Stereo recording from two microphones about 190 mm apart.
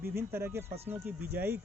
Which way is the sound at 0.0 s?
15° right (ahead or behind).